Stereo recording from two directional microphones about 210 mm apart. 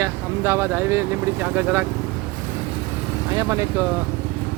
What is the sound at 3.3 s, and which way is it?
Speech, 15° right (ahead or behind).